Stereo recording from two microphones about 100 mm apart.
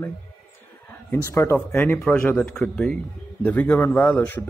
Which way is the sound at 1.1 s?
25° left (ahead or behind).